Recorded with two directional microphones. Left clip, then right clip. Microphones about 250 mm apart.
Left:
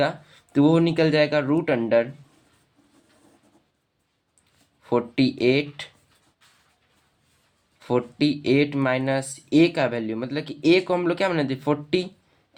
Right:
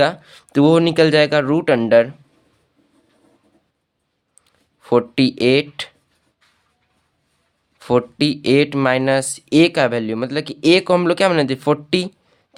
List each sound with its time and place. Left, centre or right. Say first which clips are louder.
0.0 s speech: right 7 dB; right
4.8 s speech: right 7 dB; right
7.8 s speech: right 6 dB; right